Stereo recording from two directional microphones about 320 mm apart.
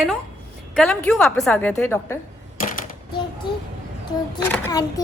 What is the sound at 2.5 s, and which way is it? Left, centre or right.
Typewriter, left.